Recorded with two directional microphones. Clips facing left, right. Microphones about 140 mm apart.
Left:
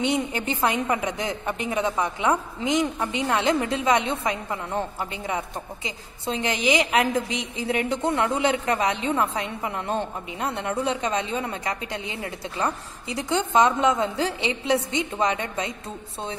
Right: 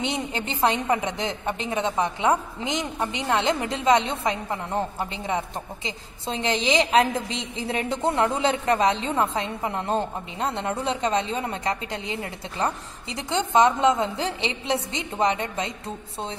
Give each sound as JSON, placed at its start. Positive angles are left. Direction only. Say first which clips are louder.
{"t": 0.0, "sound": "a woman's voice", "louder": "left 3 dB", "side_deg": -25}